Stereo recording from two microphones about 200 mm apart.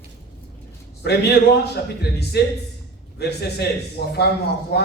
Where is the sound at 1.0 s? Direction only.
55° left (ahead or behind).